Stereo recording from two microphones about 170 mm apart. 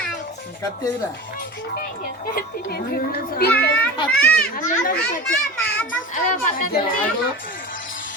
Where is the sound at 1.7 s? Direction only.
60° left (ahead or behind).